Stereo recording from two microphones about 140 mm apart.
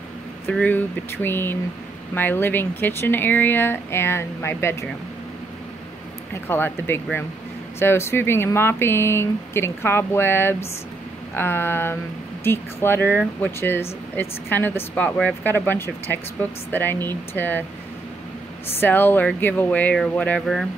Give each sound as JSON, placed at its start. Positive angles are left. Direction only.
{"t": 0.5, "sound": "speech", "side_deg": 10}
{"t": 6.3, "sound": "speech", "side_deg": 15}
{"t": 18.8, "sound": "speech", "side_deg": 15}